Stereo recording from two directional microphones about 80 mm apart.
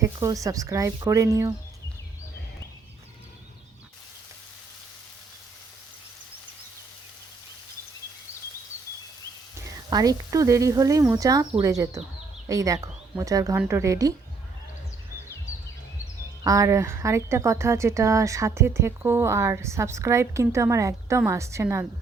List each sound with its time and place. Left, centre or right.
0.0 s speech: right
9.9 s speech: right
16.4 s speech: right